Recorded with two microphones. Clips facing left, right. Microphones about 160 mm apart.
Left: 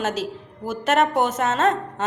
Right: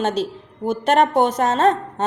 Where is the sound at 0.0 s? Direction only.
30° right (ahead or behind).